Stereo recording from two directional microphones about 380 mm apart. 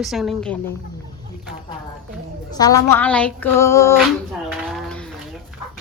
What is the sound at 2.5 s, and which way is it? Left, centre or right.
Speech, centre.